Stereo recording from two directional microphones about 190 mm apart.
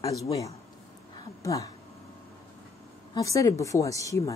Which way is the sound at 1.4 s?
15° left (ahead or behind).